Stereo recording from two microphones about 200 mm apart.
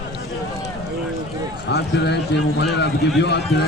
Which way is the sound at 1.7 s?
55° left (ahead or behind).